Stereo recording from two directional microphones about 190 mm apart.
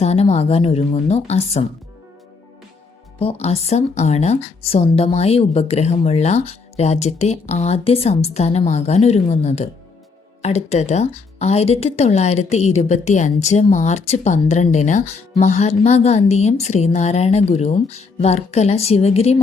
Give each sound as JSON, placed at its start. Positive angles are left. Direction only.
{"t": 0.0, "sound": "speech", "side_deg": 35}
{"t": 3.2, "sound": "speech", "side_deg": 30}